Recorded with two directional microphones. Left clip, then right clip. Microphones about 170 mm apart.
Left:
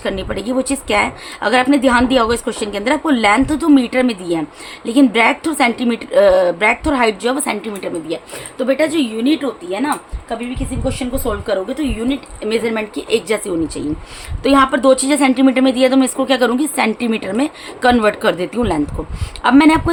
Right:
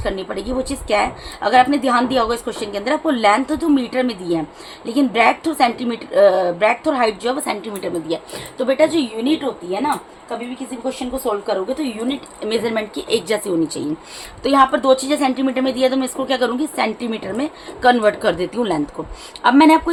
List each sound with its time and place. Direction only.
0.0 s a woman's voice: 35° left (ahead or behind)
7.7 s a woman's voice: 15° left (ahead or behind)
9.7 s speech: 45° left (ahead or behind)
11.4 s a woman's voice: 25° left (ahead or behind); by 13.8 s 10° left (ahead or behind)
14.4 s a woman's voice: 30° left (ahead or behind)